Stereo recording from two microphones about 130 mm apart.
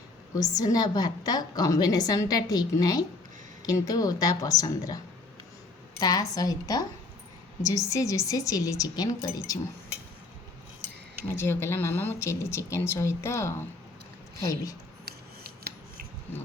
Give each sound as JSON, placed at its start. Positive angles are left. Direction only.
{"t": 0.3, "sound": "a woman's voice", "side_deg": 30}
{"t": 6.0, "sound": "a woman's voice", "side_deg": 30}
{"t": 11.3, "sound": "a woman's voice", "side_deg": 20}